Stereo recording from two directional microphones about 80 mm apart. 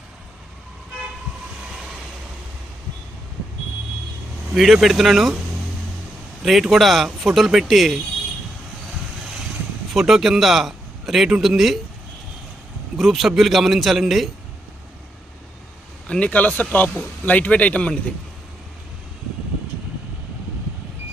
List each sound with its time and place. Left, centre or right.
4.5 s a man's voice: centre
6.4 s a man's voice: centre
9.9 s a man's voice: centre
13.0 s a man's voice: centre
16.0 s a man's voice: centre